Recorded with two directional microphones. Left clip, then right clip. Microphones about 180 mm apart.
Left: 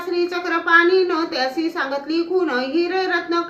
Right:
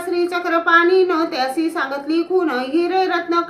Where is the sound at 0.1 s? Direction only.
20° right (ahead or behind).